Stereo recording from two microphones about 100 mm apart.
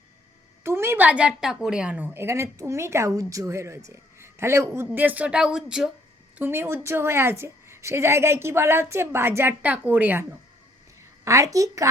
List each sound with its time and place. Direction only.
0.6 s a woman's voice: 25° right (ahead or behind); by 5.9 s 5° right (ahead or behind)
6.4 s a woman's voice: 25° right (ahead or behind)
11.3 s a woman's voice: 35° right (ahead or behind)